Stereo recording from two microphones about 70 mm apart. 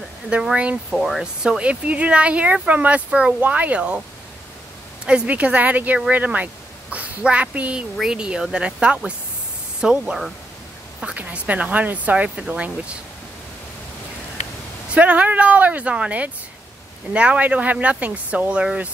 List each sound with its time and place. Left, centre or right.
0.3 s speech: centre
0.9 s speech: centre
1.4 s speech: centre
5.0 s a woman's voice: centre
11.1 s speech: right
15.0 s speech: right